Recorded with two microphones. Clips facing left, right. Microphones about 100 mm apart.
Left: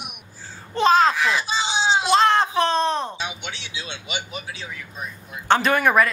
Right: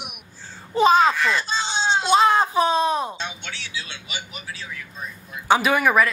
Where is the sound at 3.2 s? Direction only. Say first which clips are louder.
Left 1 dB; 15° left (ahead or behind).